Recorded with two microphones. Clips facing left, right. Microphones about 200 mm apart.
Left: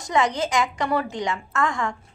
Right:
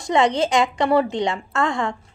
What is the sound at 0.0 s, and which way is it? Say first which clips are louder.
A woman's voice: right 4 dB; 30° right (ahead or behind).